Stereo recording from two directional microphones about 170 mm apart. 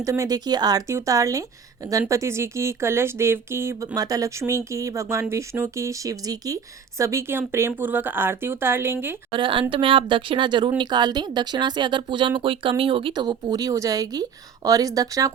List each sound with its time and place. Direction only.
0.0 s speech: 20° right (ahead or behind)
9.3 s speech: 30° right (ahead or behind)